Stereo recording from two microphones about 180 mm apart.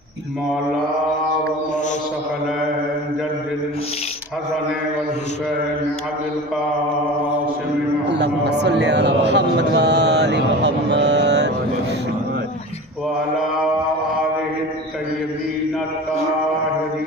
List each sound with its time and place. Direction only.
8.1 s a man's voice: 70° right (ahead or behind)